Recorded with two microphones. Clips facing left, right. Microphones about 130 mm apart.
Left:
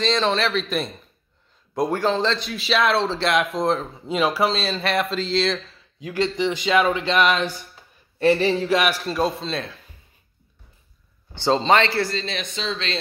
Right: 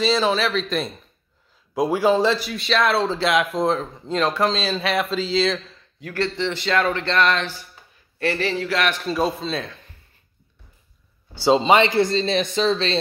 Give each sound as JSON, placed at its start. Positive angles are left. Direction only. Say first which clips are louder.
{"t": 0.0, "sound": "speech", "louder": "right 1 dB", "side_deg": -5}
{"t": 5.9, "sound": "speech", "louder": "left 2 dB", "side_deg": 15}
{"t": 9.0, "sound": "speech", "louder": "right 1 dB", "side_deg": 0}
{"t": 11.3, "sound": "speech", "louder": "right 2 dB", "side_deg": -10}